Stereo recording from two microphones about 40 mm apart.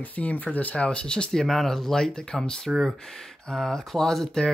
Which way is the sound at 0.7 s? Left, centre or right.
Left.